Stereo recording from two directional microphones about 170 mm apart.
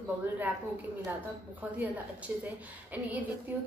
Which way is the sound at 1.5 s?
10° right (ahead or behind).